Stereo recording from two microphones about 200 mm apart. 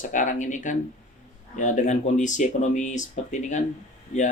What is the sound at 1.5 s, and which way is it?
Speech, 40° left (ahead or behind).